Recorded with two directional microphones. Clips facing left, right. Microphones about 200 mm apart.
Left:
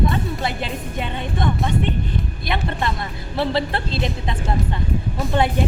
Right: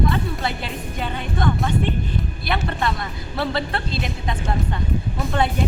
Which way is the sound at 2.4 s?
20° left (ahead or behind).